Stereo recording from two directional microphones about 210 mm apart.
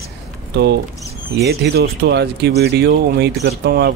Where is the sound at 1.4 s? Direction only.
50° right (ahead or behind).